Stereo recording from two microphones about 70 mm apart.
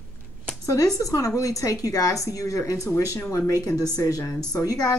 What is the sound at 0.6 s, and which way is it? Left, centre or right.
A woman's voice, left.